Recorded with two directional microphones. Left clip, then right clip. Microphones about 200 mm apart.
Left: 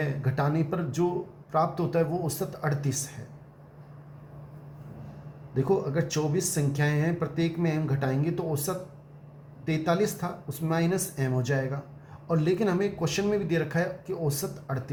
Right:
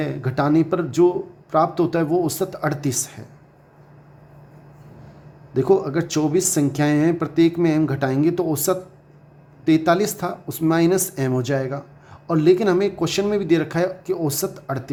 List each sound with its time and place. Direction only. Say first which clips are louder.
0.0 s speech: right 7 dB; 40° right (ahead or behind)
5.5 s speech: right 8 dB; 40° right (ahead or behind)